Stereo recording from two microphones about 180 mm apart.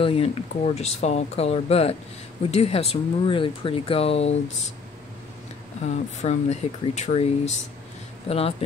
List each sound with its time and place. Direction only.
0.0 s speech: 30° left (ahead or behind)
5.8 s speech: 40° left (ahead or behind)